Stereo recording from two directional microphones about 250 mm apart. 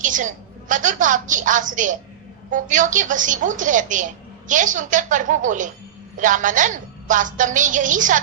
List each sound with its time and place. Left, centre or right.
0.0 s a woman's voice: right